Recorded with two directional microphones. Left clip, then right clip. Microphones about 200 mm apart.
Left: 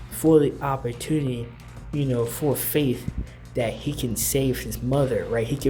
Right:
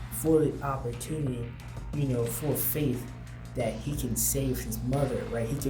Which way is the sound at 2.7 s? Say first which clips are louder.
Left 8 dB; 45° left (ahead or behind).